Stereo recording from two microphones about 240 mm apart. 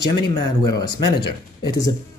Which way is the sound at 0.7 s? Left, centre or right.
Centre.